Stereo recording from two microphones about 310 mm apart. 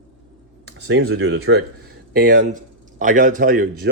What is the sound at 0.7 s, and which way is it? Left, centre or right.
Speech, right.